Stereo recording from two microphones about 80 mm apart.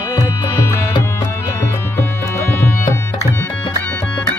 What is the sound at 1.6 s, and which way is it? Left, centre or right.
Tabla, left.